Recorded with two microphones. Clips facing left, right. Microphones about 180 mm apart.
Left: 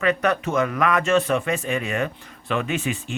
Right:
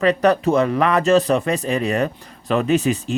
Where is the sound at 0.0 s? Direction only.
35° right (ahead or behind).